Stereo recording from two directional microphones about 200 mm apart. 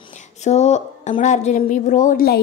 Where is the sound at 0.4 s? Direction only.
35° left (ahead or behind).